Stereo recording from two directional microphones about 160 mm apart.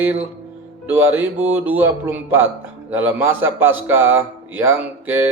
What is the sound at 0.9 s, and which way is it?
A man's voice, 15° right (ahead or behind).